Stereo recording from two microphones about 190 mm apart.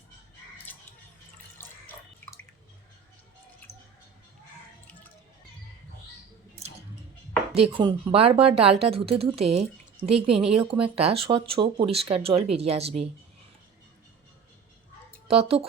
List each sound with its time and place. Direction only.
0.7 s a sound: 10° left (ahead or behind)
1.5 s water: 10° left (ahead or behind)
7.5 s speech: 30° right (ahead or behind)
15.3 s speech: 30° right (ahead or behind)